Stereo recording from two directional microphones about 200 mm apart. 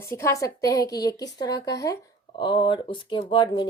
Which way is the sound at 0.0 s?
15° left (ahead or behind).